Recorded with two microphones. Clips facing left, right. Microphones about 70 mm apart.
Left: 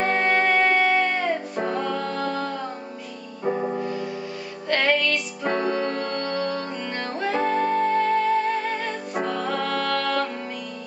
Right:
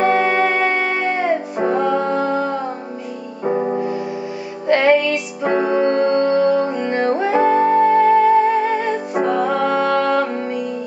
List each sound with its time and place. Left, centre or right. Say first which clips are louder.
0.0 s music: right 6 dB; centre